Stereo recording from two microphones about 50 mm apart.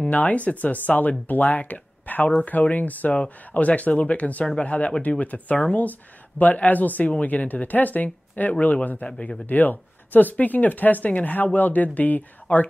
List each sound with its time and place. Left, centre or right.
0.1 s speech: left